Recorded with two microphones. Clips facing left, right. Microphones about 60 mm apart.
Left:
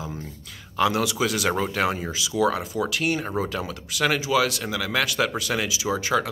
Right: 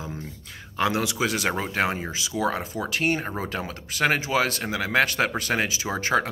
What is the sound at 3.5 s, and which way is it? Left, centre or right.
Speech, right.